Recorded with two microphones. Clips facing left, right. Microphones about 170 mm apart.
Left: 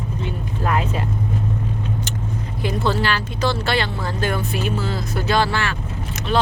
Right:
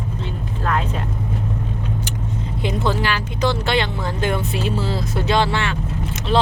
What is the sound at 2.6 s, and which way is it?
Music, 20° right (ahead or behind).